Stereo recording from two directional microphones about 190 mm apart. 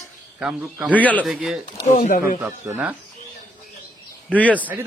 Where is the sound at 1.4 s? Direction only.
5° right (ahead or behind).